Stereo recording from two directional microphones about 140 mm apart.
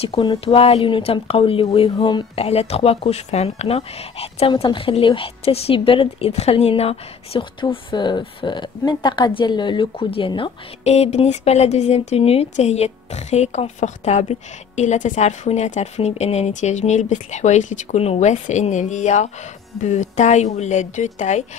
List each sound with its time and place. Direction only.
0.0 s speech: 35° left (ahead or behind)
10.8 s speech: 50° left (ahead or behind)